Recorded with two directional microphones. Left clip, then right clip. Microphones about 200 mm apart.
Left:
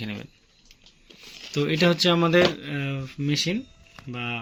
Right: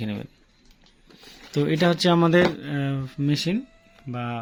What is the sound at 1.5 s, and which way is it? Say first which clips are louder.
Speech: even; 45° right (ahead or behind).